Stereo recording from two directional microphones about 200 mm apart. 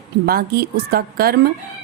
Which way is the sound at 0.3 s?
50° right (ahead or behind).